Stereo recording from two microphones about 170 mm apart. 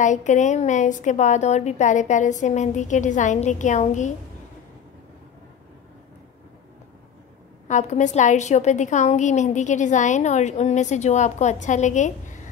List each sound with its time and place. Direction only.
0.0 s a woman's voice: 45° left (ahead or behind)
7.6 s a woman's voice: 45° left (ahead or behind)